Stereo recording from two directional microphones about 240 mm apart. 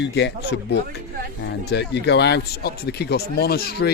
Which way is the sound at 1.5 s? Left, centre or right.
Left.